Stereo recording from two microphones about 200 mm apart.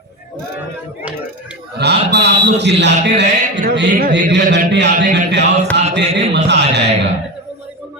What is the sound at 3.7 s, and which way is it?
Speech, 60° right (ahead or behind).